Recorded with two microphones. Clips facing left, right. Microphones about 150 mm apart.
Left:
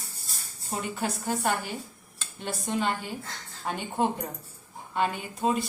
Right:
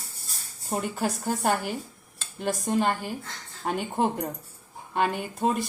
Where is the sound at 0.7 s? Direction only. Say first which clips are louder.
Right 3 dB; 50° right (ahead or behind).